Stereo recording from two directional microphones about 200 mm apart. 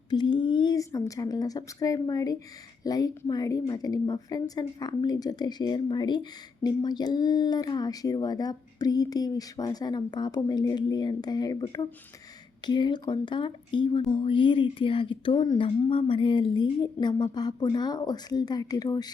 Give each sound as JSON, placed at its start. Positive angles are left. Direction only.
{"t": 0.1, "sound": "a woman's voice", "side_deg": 20}